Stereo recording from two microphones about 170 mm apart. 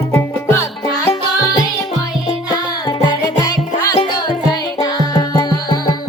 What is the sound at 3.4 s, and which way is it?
Music, 20° left (ahead or behind).